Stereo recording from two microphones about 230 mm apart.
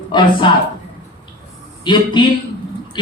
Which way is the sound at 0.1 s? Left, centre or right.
Left.